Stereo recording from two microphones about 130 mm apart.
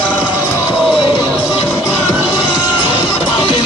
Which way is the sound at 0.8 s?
Centre (ahead or behind).